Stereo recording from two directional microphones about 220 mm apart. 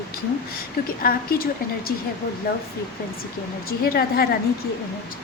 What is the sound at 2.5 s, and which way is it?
Speech, 45° left (ahead or behind).